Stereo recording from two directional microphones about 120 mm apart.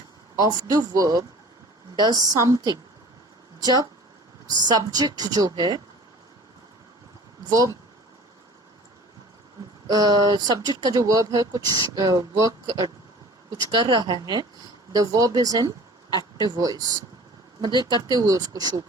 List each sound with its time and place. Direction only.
0.3 s speech: 35° right (ahead or behind)
7.5 s speech: 30° right (ahead or behind)
9.8 s speech: 30° right (ahead or behind)
18.1 s speech: 30° right (ahead or behind)